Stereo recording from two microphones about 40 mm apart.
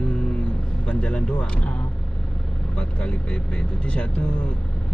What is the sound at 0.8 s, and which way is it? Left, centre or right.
Speech, left.